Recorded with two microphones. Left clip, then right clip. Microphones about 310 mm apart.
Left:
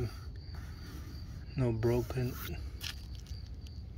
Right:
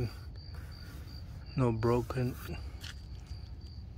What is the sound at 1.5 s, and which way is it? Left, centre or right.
Speech, centre.